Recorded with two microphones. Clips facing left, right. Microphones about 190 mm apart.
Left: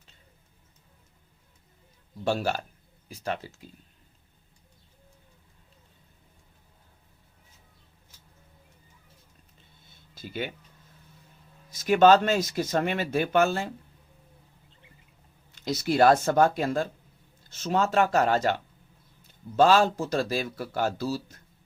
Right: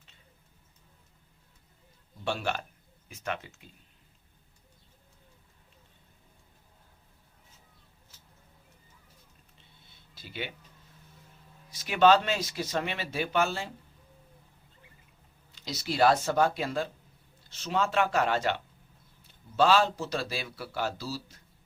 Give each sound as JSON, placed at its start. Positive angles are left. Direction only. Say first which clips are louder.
{"t": 2.2, "sound": "speech", "louder": "left 5 dB", "side_deg": 40}
{"t": 10.2, "sound": "speech", "louder": "left 5 dB", "side_deg": 45}
{"t": 11.7, "sound": "speech", "louder": "left 4 dB", "side_deg": 45}
{"t": 15.6, "sound": "speech", "louder": "left 4 dB", "side_deg": 50}